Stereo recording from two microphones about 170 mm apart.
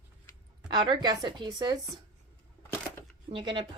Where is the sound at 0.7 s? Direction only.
25° right (ahead or behind).